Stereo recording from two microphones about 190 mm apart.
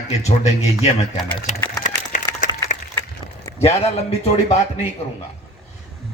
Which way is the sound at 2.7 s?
40° left (ahead or behind).